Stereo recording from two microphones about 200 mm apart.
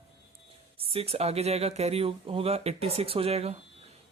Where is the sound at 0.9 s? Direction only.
30° right (ahead or behind).